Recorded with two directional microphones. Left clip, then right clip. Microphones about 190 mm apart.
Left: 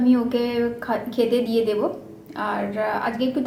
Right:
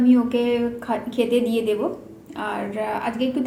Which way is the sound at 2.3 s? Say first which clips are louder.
Left 2 dB; 5° right (ahead or behind).